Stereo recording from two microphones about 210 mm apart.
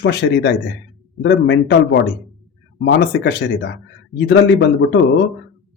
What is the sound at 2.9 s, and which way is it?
Speech, 50° left (ahead or behind).